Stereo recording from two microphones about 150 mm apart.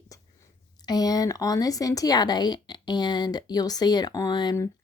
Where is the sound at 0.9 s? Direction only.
25° left (ahead or behind).